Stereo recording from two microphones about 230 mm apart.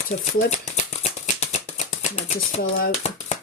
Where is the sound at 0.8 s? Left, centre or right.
Left.